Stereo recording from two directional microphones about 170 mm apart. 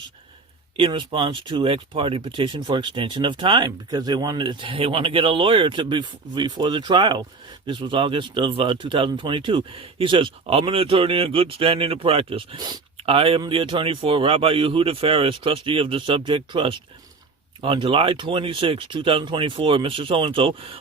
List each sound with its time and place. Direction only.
0.8 s speech: 30° right (ahead or behind)